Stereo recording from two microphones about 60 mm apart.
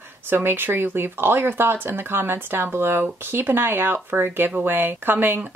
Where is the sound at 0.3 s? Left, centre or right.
Right.